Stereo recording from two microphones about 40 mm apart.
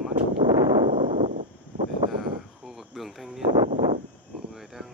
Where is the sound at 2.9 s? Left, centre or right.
Centre.